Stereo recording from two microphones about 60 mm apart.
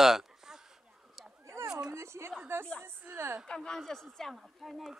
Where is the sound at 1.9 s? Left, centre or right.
Right.